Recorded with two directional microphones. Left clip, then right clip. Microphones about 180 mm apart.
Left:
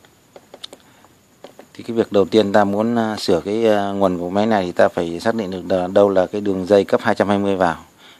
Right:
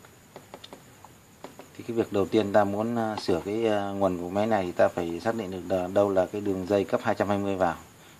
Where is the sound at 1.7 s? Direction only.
45° left (ahead or behind).